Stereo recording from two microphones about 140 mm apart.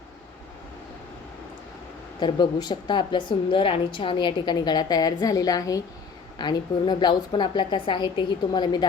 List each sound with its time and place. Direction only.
2.2 s a woman's voice: 30° left (ahead or behind)